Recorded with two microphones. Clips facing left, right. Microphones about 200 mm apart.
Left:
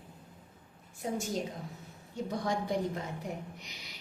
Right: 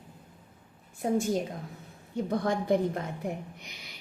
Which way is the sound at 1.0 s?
55° right (ahead or behind).